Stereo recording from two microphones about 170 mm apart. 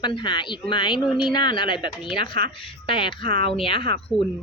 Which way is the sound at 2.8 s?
30° left (ahead or behind).